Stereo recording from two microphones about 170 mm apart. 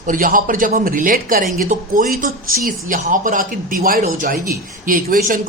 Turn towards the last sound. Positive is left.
turn(degrees=-55)  # may be behind; listen again after turning